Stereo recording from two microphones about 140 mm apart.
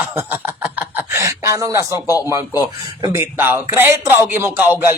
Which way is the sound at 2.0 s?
25° left (ahead or behind).